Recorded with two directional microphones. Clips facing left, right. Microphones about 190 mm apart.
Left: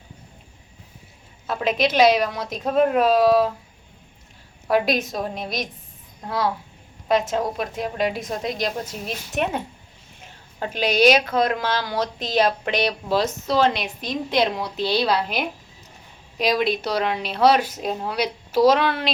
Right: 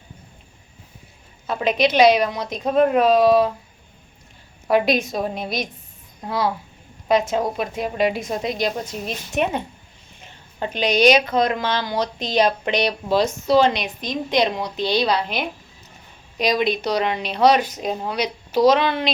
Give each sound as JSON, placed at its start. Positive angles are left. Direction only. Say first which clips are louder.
{"t": 1.5, "sound": "a woman's voice", "louder": "right 2 dB", "side_deg": 0}
{"t": 4.7, "sound": "a woman's voice", "louder": "right 2 dB", "side_deg": 0}